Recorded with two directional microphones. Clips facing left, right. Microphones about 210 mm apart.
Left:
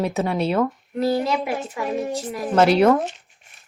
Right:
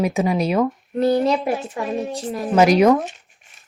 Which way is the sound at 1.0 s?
35° right (ahead or behind).